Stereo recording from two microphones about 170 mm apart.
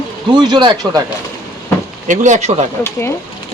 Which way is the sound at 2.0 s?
45° right (ahead or behind).